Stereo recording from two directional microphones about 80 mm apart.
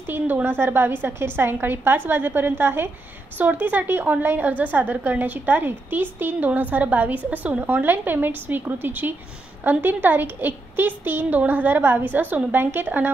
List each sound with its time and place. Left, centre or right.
0.0 s a woman's voice: right